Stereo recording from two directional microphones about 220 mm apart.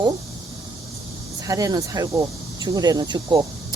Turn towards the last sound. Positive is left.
turn(degrees=-20)  # may be behind; listen again after turning